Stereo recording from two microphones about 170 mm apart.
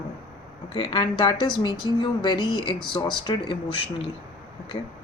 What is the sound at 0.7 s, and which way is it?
A woman's voice, 25° left (ahead or behind).